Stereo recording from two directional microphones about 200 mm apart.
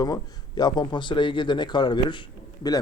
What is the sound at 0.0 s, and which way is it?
A man's voice, 20° left (ahead or behind).